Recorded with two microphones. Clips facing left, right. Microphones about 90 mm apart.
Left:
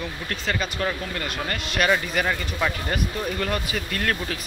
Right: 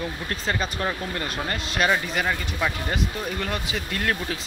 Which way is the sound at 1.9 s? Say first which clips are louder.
Left 1 dB; 5° right (ahead or behind).